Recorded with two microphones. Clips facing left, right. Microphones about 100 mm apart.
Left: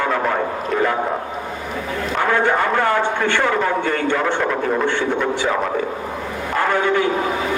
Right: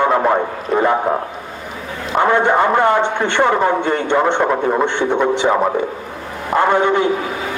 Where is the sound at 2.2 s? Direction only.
25° right (ahead or behind).